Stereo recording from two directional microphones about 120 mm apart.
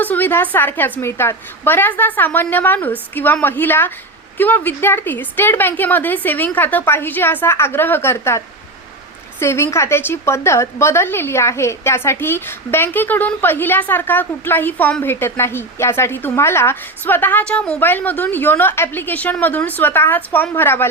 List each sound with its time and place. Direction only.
0.0 s a woman's voice: 15° left (ahead or behind)
9.4 s a woman's voice: 20° left (ahead or behind)